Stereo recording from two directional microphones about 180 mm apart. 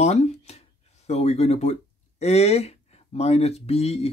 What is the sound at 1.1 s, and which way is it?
Speech, 35° left (ahead or behind).